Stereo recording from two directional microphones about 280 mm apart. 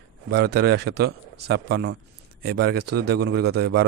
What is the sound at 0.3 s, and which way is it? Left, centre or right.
A man's voice, right.